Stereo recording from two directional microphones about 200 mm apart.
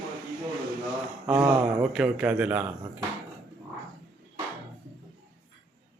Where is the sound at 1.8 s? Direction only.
5° right (ahead or behind).